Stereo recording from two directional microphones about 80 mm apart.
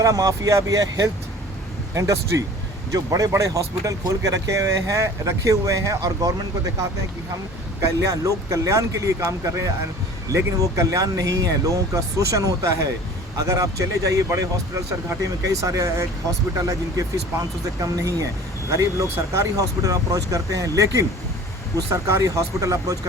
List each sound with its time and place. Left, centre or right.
0.0 s speech: right
7.8 s speech: right